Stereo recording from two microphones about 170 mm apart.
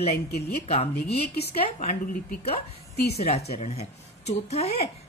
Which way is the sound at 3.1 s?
40° left (ahead or behind).